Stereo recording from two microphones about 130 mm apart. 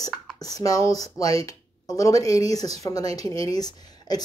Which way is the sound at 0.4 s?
25° left (ahead or behind).